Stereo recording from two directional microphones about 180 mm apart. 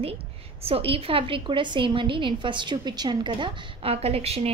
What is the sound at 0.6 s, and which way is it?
A woman's voice, 35° right (ahead or behind).